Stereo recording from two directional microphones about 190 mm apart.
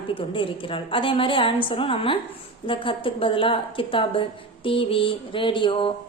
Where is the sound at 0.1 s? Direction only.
25° left (ahead or behind).